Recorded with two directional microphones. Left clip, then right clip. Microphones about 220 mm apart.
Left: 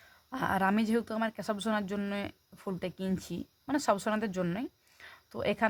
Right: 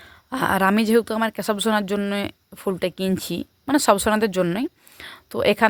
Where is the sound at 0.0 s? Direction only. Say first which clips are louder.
Right 11 dB; 40° right (ahead or behind).